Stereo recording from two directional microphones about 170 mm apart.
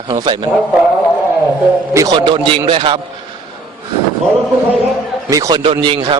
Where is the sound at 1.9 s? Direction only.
20° right (ahead or behind).